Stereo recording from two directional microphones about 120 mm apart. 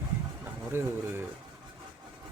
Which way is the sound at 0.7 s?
20° right (ahead or behind).